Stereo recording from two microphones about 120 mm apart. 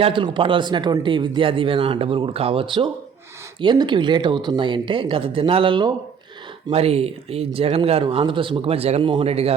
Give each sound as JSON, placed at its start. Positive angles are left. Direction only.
{"t": 0.0, "sound": "speech", "side_deg": -45}
{"t": 6.7, "sound": "speech", "side_deg": -60}